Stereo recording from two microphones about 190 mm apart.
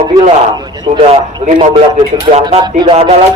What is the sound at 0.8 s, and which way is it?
Speech, 25° right (ahead or behind).